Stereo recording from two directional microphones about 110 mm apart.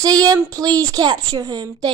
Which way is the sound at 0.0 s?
35° right (ahead or behind).